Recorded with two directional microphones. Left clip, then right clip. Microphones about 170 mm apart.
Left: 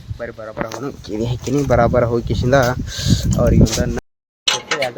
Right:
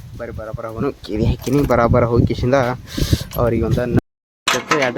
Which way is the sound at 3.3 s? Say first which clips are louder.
Left 1 dB; 20° right (ahead or behind).